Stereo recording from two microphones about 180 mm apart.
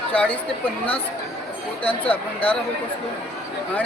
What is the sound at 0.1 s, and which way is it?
Speech, 5° left (ahead or behind).